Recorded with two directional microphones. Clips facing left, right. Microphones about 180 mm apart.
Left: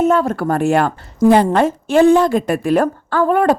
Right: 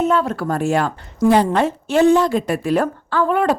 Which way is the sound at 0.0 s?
45° left (ahead or behind).